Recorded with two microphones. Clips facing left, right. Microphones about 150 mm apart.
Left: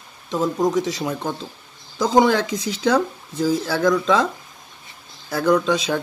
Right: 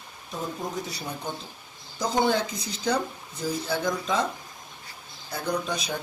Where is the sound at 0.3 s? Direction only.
90° left.